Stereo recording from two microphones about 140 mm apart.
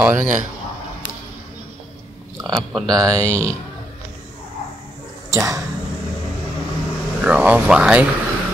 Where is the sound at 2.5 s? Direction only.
5° left (ahead or behind).